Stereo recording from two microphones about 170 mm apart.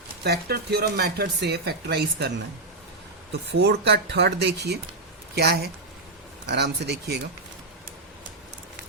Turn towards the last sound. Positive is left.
turn(degrees=-70)  # may be behind; listen again after turning